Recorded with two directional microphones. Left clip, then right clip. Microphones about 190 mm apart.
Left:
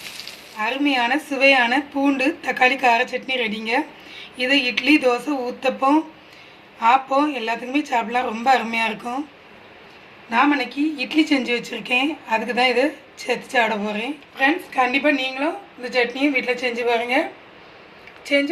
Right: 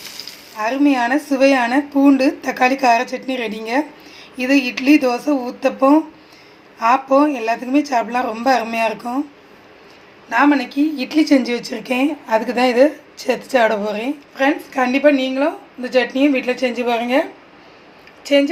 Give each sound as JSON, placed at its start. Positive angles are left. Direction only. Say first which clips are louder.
{"t": 0.5, "sound": "a woman's voice", "louder": "right 4 dB", "side_deg": -30}
{"t": 10.2, "sound": "a woman's voice", "louder": "right 3 dB", "side_deg": -40}
{"t": 18.3, "sound": "speech", "louder": "right 5 dB", "side_deg": -40}